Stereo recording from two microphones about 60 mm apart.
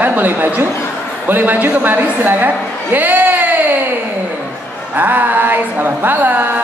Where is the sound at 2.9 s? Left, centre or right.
Right.